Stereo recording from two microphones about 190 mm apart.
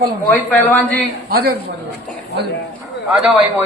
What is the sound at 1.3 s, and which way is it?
Speech, 50° right (ahead or behind).